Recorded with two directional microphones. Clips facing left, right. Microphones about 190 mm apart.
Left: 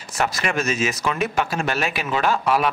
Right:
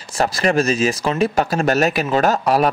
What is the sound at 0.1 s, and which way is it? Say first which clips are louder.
Speech: right 6 dB; 35° right (ahead or behind).